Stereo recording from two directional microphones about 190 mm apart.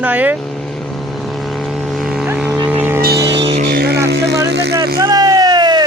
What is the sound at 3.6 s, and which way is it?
Vehicle, 55° right (ahead or behind).